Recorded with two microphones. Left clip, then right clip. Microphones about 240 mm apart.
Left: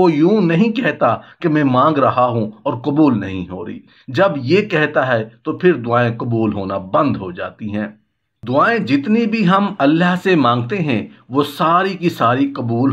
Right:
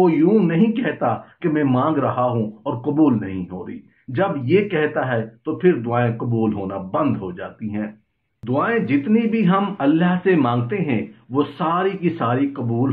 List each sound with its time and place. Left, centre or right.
0.0 s speech: left